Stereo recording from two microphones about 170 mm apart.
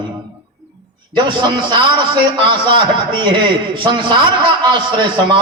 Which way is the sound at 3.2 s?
30° right (ahead or behind).